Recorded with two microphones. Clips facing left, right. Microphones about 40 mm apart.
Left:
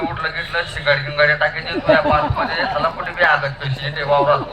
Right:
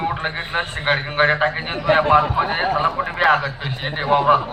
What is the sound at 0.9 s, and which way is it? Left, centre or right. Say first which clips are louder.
Speech: left 2 dB; left.